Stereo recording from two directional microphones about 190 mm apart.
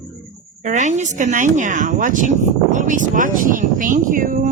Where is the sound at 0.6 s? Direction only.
40° right (ahead or behind).